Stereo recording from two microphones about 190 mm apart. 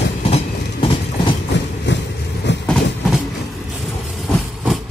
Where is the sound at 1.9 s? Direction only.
70° left (ahead or behind).